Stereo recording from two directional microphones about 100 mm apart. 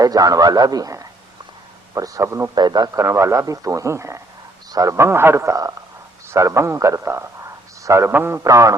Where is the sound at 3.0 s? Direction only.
30° right (ahead or behind).